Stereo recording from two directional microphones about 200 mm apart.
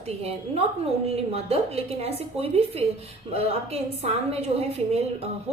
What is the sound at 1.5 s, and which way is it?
A woman's voice, 30° right (ahead or behind).